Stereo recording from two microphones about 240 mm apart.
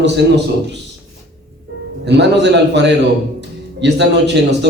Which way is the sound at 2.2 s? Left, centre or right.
Right.